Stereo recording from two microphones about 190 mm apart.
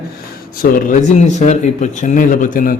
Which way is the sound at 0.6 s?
50° left (ahead or behind).